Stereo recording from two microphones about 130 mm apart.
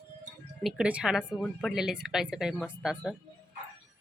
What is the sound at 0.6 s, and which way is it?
Speech, 5° right (ahead or behind).